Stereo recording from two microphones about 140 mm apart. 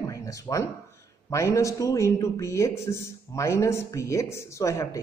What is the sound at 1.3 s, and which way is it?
A man's voice, 20° left (ahead or behind).